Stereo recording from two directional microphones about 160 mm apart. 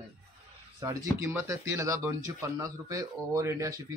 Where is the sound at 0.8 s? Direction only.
20° right (ahead or behind).